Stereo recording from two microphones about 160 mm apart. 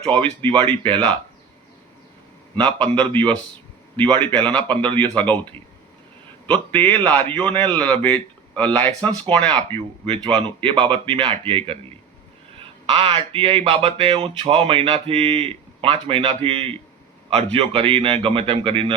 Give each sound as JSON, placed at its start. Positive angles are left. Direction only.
{"t": 0.9, "sound": "a man's voice", "side_deg": 10}
{"t": 2.6, "sound": "a man's voice", "side_deg": 10}
{"t": 9.7, "sound": "speech", "side_deg": -35}